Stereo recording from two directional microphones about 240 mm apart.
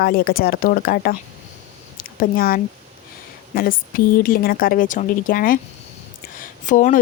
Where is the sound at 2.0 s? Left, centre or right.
Left.